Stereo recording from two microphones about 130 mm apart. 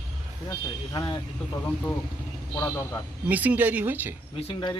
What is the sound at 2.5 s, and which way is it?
Speech, 25° left (ahead or behind).